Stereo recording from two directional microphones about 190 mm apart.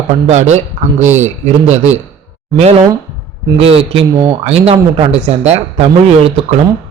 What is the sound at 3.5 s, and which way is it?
Speech, 30° right (ahead or behind).